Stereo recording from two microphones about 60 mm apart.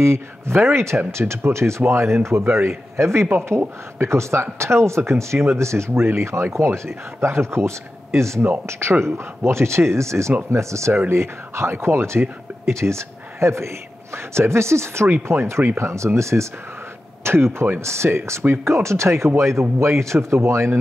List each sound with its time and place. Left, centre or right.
0.0 s speech: right
10.9 s speech: right
17.2 s speech: right